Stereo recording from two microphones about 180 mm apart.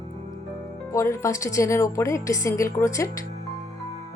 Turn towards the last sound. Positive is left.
turn(degrees=15)  # may be behind; listen again after turning